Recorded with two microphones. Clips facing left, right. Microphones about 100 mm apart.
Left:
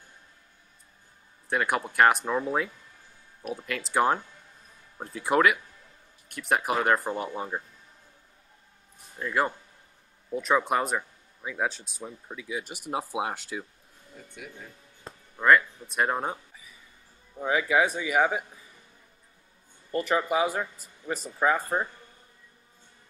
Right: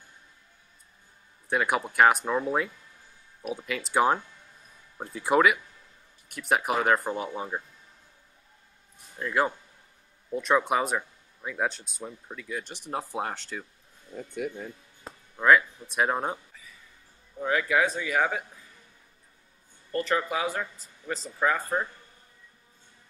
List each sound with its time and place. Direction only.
1.5 s speech: centre (ahead or behind)
9.2 s speech: centre (ahead or behind)
14.3 s speech: 45° right (ahead or behind)
15.0 s speech: 5° right (ahead or behind)
17.4 s speech: 10° left (ahead or behind)
19.9 s speech: 15° left (ahead or behind)